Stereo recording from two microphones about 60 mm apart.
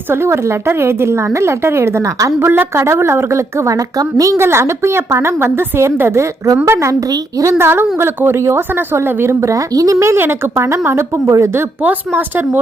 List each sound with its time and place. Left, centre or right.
0.1 s a woman's voice: right
2.4 s a woman's voice: right
4.4 s a woman's voice: right
7.1 s a woman's voice: right
7.6 s a woman's voice: right
9.4 s a woman's voice: right
10.2 s a woman's voice: right
11.8 s a woman's voice: right